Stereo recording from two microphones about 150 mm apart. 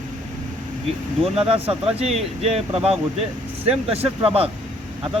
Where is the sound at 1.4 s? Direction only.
35° right (ahead or behind).